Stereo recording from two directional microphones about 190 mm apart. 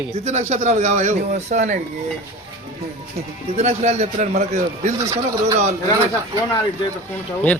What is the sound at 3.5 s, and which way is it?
Speech, 35° right (ahead or behind).